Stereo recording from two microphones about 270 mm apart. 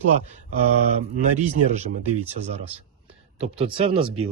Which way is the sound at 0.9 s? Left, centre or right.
Right.